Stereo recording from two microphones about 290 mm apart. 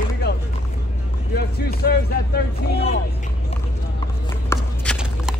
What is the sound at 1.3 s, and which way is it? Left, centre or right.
Speech, left.